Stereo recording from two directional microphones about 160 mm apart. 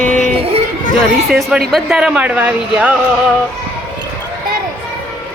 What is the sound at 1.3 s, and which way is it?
A woman's voice, centre (ahead or behind).